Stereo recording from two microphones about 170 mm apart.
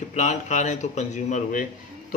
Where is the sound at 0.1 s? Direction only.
45° left (ahead or behind).